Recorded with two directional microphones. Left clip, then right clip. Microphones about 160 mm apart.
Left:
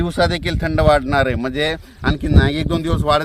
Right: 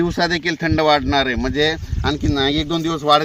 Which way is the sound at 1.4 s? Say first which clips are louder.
Right 2 dB; 40° left (ahead or behind).